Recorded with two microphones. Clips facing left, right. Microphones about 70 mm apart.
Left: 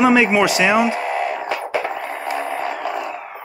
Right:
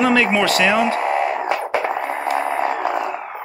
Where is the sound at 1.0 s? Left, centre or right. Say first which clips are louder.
Right 3 dB; right.